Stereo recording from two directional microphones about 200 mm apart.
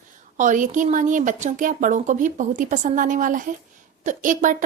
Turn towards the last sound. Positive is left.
turn(degrees=-40)  # may be behind; listen again after turning